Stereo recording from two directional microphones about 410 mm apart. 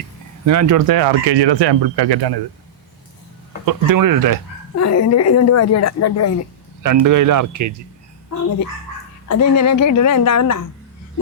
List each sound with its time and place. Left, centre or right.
0.4 s speech: right
0.9 s speech: right
3.7 s speech: right
4.8 s a woman's voice: left
6.8 s speech: right
9.3 s a woman's voice: left